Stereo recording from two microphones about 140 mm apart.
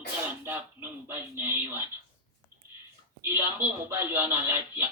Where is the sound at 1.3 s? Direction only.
15° right (ahead or behind).